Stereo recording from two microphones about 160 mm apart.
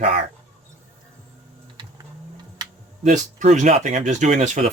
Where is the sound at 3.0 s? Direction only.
50° right (ahead or behind).